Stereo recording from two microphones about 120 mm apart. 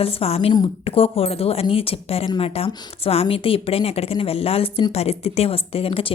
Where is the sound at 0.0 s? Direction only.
55° left (ahead or behind).